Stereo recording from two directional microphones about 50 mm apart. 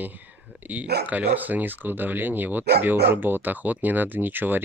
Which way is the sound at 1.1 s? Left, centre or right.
Right.